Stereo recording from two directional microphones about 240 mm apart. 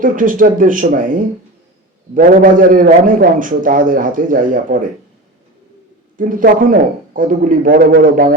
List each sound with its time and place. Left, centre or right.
0.0 s a man's voice: right
6.1 s a man's voice: right